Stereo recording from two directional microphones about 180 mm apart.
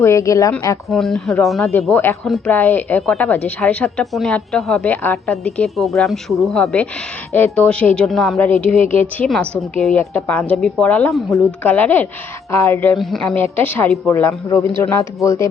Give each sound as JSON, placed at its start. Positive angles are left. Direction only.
{"t": 0.0, "sound": "a woman's voice", "side_deg": 15}
{"t": 0.9, "sound": "a woman's voice", "side_deg": 0}
{"t": 2.5, "sound": "a woman's voice", "side_deg": 10}
{"t": 13.0, "sound": "a woman's voice", "side_deg": 0}